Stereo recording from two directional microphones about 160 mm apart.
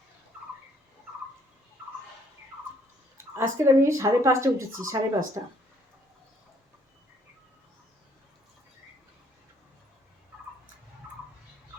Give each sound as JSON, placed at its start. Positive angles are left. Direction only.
{"t": 3.3, "sound": "speech", "side_deg": -15}